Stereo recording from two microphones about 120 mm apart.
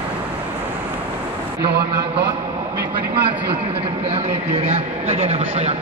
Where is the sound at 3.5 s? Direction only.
50° right (ahead or behind).